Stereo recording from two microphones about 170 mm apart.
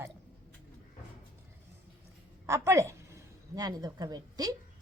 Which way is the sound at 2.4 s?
15° right (ahead or behind).